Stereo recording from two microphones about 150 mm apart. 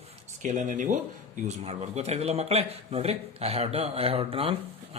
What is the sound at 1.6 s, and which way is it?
Speech, 45° right (ahead or behind).